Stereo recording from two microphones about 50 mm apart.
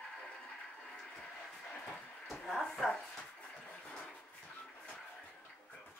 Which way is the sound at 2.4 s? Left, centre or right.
Centre.